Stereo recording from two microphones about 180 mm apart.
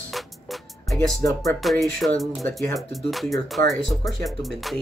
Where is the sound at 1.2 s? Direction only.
20° left (ahead or behind).